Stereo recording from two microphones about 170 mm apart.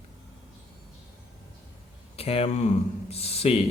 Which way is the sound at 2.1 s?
35° left (ahead or behind).